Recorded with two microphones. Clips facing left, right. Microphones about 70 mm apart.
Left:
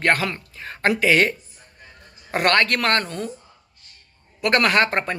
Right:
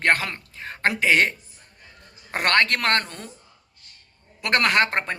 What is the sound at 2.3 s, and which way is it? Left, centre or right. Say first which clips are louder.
Speech: left 2 dB; right.